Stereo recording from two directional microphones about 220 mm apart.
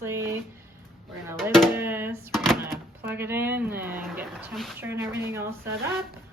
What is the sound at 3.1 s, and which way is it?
A woman's voice, 10° right (ahead or behind).